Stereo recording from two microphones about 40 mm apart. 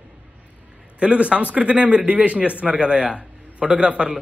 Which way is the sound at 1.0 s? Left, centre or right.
Right.